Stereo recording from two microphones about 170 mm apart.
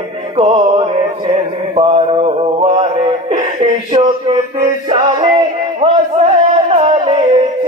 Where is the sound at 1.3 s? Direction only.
35° right (ahead or behind).